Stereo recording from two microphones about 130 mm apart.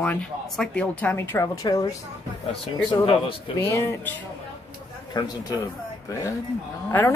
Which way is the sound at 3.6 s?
20° left (ahead or behind).